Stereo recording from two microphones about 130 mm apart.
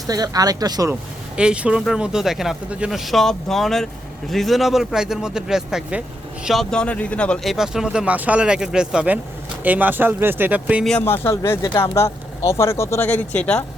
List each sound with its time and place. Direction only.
0.1 s speech: 30° right (ahead or behind)
1.4 s speech: 10° right (ahead or behind)
11.0 s speech: 20° left (ahead or behind)
13.1 s speech: 10° left (ahead or behind)